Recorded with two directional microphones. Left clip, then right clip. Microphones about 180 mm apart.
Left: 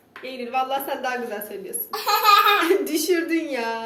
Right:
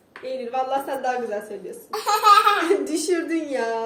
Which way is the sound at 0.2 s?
50° right (ahead or behind).